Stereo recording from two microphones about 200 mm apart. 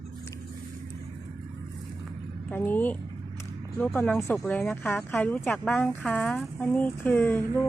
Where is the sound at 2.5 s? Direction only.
10° left (ahead or behind).